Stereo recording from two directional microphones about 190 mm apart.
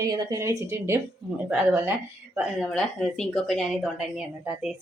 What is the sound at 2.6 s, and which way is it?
Speech, centre (ahead or behind).